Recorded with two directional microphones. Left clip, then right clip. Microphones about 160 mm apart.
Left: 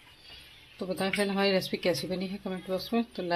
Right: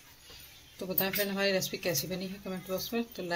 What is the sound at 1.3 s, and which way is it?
A woman's voice, 25° left (ahead or behind).